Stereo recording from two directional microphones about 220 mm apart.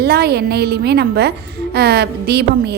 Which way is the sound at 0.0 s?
45° right (ahead or behind).